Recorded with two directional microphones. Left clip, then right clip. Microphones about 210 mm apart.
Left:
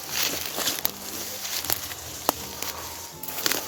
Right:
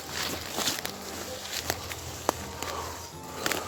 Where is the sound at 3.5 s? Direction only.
30° left (ahead or behind).